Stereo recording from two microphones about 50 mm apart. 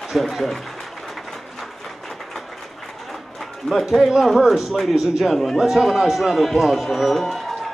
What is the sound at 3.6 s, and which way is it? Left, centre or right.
A man's voice, centre.